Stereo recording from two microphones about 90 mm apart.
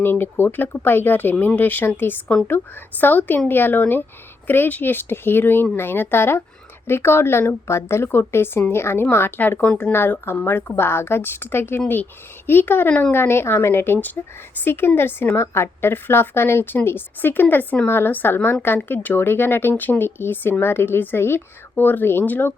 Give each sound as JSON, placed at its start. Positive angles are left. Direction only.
{"t": 0.0, "sound": "a woman's voice", "side_deg": 25}